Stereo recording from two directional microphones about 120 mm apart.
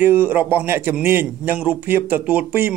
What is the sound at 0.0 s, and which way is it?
A man's voice, 15° right (ahead or behind).